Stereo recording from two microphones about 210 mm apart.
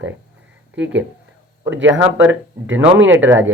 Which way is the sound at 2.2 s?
65° right (ahead or behind).